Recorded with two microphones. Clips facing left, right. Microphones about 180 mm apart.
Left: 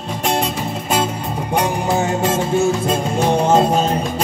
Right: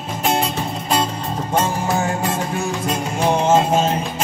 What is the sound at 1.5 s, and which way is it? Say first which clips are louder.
Music: left 2 dB; 15° left (ahead or behind).